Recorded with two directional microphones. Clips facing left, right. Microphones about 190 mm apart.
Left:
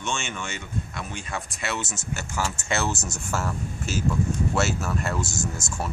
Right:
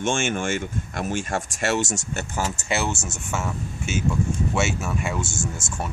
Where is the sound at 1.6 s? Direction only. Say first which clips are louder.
Right 9 dB; 75° right (ahead or behind).